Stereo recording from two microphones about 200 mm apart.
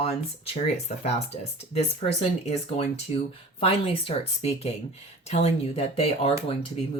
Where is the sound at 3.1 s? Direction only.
30° left (ahead or behind).